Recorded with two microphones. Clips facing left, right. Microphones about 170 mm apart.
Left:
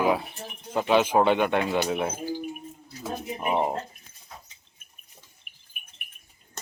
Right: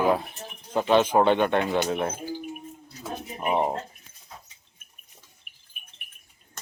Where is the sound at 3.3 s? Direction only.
5° right (ahead or behind).